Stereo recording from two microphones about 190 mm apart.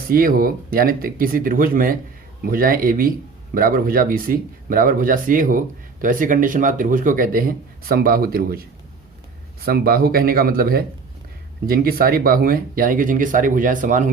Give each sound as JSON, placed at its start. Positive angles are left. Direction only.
{"t": 0.1, "sound": "speech", "side_deg": -50}
{"t": 9.6, "sound": "speech", "side_deg": -50}